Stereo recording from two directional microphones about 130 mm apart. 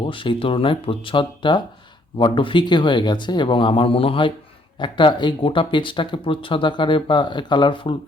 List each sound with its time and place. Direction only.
0.0 s speech: 40° left (ahead or behind)